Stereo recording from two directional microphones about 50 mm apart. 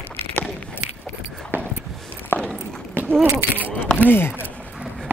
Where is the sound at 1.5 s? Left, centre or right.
Right.